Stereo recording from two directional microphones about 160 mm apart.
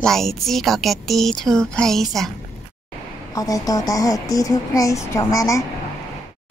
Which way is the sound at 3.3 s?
20° left (ahead or behind).